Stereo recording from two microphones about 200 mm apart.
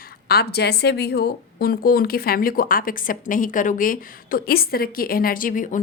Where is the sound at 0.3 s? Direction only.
55° left (ahead or behind).